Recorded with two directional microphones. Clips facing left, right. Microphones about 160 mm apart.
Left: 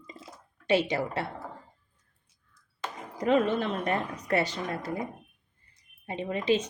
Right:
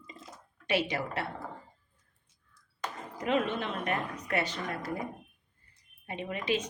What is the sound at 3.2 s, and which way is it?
Speech, 35° left (ahead or behind).